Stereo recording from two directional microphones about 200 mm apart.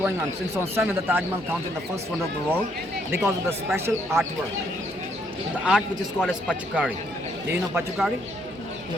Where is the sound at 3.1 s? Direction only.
10° right (ahead or behind).